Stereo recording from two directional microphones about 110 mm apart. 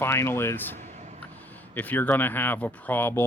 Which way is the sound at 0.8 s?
90° right.